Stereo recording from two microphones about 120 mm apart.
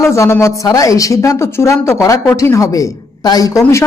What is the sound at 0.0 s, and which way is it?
Speech, 25° left (ahead or behind).